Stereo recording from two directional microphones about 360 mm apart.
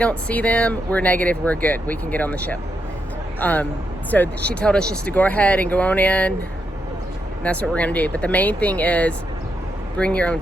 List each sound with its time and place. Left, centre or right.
0.0 s speech: centre
7.4 s speech: centre